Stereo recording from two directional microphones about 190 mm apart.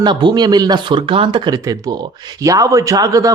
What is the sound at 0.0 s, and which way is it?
A man's voice, 25° right (ahead or behind).